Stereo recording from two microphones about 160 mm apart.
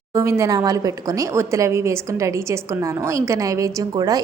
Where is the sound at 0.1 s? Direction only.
15° right (ahead or behind).